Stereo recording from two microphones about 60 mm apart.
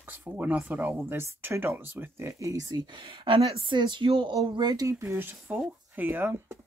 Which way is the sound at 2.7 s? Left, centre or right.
Right.